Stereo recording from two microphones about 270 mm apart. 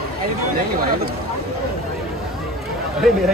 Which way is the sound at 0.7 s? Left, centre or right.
Right.